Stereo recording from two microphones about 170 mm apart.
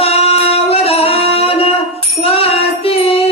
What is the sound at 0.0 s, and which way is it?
Singing, 35° left (ahead or behind).